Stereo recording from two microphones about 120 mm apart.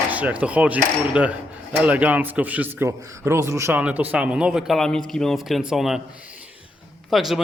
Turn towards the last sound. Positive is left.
turn(degrees=0)  # may be behind; listen again after turning